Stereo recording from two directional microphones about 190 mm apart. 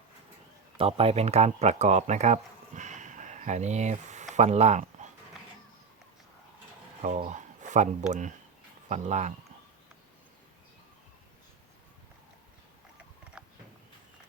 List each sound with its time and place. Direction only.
0.8 s speech: 30° right (ahead or behind)
7.0 s speech: 35° right (ahead or behind)
13.4 s a sound: 5° right (ahead or behind)